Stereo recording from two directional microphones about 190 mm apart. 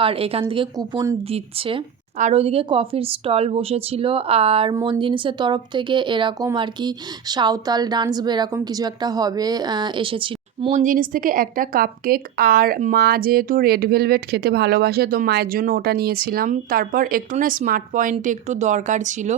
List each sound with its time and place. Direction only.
0.0 s a woman's voice: 30° right (ahead or behind)